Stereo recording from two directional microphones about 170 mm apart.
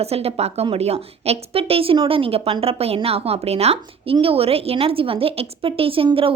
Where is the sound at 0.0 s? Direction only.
35° right (ahead or behind).